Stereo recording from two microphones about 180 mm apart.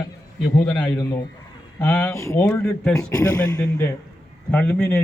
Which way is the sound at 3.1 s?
20° left (ahead or behind).